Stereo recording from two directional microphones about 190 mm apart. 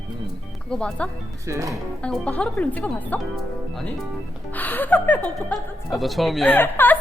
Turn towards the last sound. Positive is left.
turn(degrees=10)  # may be behind; listen again after turning